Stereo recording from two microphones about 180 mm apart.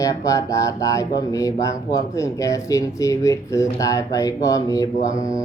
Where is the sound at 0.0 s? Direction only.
20° left (ahead or behind).